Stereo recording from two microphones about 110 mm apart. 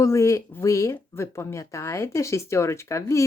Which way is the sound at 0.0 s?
25° left (ahead or behind).